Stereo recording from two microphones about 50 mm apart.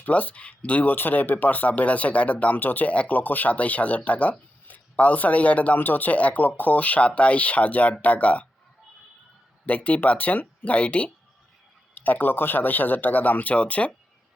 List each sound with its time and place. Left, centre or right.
0.0 s speech: left
9.6 s speech: left